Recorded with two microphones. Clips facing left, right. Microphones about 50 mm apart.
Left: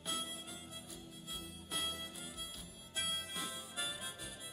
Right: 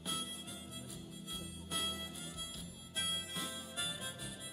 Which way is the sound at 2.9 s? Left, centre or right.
Centre.